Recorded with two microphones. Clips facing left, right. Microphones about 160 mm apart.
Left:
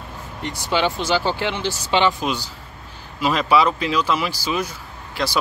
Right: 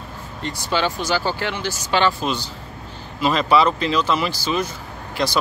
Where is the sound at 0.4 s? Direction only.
20° left (ahead or behind).